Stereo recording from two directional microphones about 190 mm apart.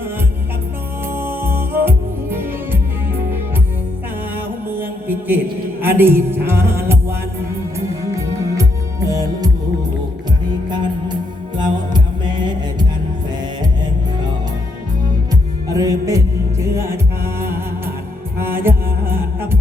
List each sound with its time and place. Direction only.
1.1 s music: 10° right (ahead or behind)
4.7 s mantra: 10° right (ahead or behind)
5.8 s music: 10° right (ahead or behind)
11.5 s music: 25° right (ahead or behind)
15.7 s music: 20° right (ahead or behind)